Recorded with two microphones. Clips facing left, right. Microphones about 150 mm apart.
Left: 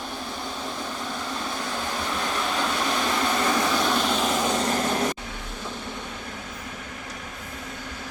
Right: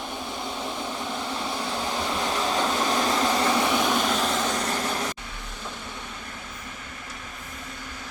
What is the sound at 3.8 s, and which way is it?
Vehicle, centre (ahead or behind).